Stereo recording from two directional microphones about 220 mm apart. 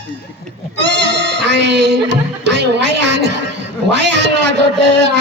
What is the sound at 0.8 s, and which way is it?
Speech, 50° right (ahead or behind).